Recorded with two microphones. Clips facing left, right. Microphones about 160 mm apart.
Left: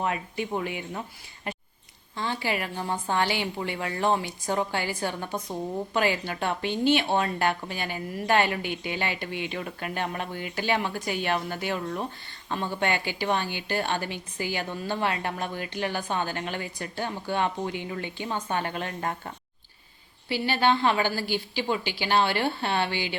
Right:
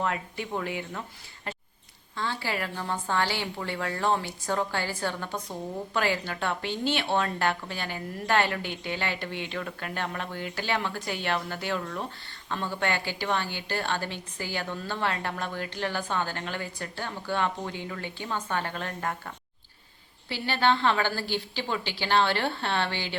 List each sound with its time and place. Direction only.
0.0 s speech: 20° left (ahead or behind)
2.1 s a woman's voice: 15° left (ahead or behind)
20.2 s a woman's voice: 15° left (ahead or behind)